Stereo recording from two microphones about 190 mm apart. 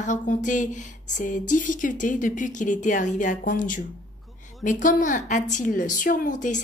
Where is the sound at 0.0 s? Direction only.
40° left (ahead or behind).